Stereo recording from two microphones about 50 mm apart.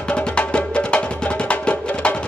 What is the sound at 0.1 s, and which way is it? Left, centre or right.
Music, left.